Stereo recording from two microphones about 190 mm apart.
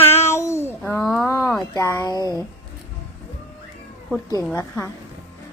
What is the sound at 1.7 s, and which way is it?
Speech, 15° left (ahead or behind).